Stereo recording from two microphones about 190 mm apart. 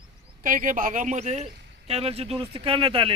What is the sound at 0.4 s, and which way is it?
Speech, 45° right (ahead or behind).